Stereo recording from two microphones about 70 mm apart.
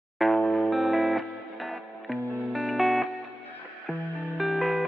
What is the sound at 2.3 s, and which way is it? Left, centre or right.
Music, centre.